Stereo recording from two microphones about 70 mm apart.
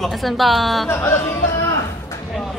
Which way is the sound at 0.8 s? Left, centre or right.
Left.